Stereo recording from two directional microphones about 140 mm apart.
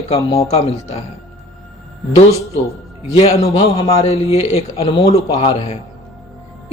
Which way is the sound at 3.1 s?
45° left (ahead or behind).